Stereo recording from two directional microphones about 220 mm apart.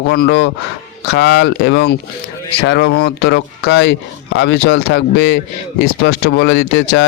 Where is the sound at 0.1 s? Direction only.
50° left (ahead or behind).